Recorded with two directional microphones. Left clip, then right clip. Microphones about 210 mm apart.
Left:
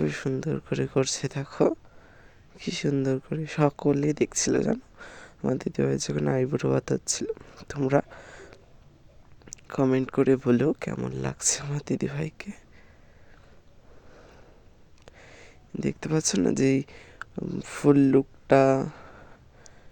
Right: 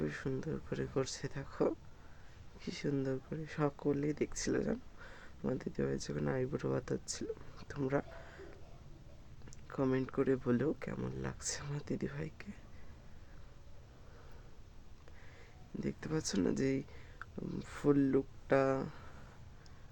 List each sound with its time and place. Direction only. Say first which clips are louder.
0.0 s speech: left 11 dB; 40° left (ahead or behind)
9.5 s speech: left 11 dB; 40° left (ahead or behind)
15.0 s speech: left 11 dB; 40° left (ahead or behind)